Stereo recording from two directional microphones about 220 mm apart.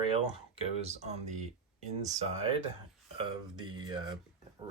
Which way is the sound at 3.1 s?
20° right (ahead or behind).